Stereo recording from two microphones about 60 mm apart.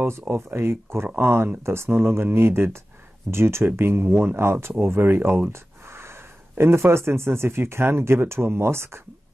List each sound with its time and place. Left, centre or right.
0.3 s speech: right
5.5 s a sound: right
6.6 s speech: right